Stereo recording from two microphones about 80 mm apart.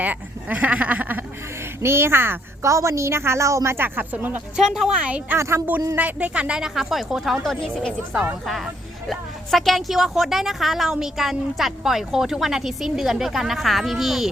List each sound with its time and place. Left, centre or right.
0.0 s a woman's voice: centre
4.5 s speech: centre
4.9 s speech: centre
5.4 s a woman's voice: right
6.0 s speech: centre